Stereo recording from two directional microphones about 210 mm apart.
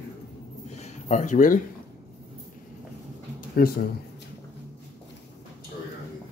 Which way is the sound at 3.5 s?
45° left (ahead or behind).